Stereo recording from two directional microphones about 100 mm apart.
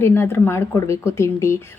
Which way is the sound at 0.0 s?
25° left (ahead or behind).